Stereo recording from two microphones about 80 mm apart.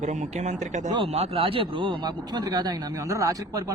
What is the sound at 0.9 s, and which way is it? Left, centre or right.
A man's voice, right.